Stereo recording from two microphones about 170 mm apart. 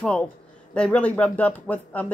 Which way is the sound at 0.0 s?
5° left (ahead or behind).